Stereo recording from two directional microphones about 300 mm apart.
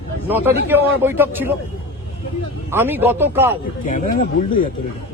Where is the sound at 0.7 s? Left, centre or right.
Centre.